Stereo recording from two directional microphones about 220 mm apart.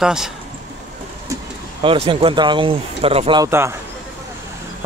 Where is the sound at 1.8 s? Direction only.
25° right (ahead or behind).